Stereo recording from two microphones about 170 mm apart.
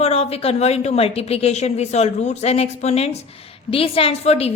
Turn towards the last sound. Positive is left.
turn(degrees=35)  # may be behind; listen again after turning